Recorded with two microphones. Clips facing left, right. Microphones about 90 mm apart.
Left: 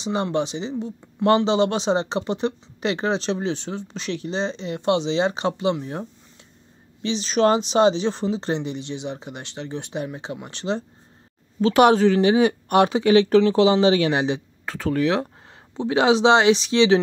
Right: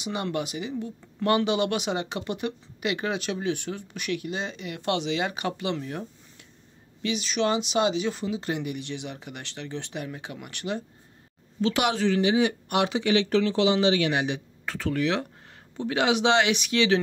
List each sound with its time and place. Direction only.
0.0 s speech: 30° left (ahead or behind)
11.6 s speech: 40° left (ahead or behind); by 17.0 s 25° left (ahead or behind)